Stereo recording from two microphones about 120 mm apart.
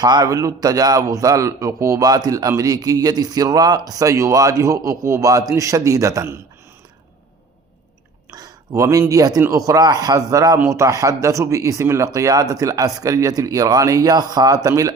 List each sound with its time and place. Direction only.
0.0 s a man's voice: 35° right (ahead or behind)
8.3 s a man's voice: 30° right (ahead or behind)